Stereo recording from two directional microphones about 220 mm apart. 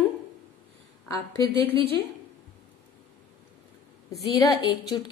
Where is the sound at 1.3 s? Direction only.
25° right (ahead or behind).